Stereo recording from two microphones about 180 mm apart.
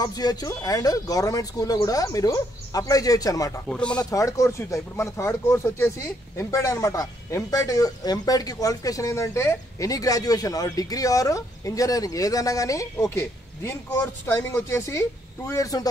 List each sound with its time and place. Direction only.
0.0 s speech: 20° left (ahead or behind)
3.6 s speech: 5° left (ahead or behind)
4.0 s speech: 20° left (ahead or behind)